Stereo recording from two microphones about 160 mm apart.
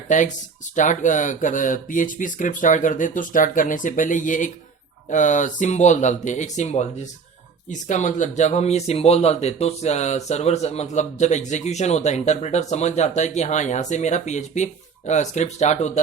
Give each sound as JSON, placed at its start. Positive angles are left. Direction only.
{"t": 0.1, "sound": "speech", "side_deg": 50}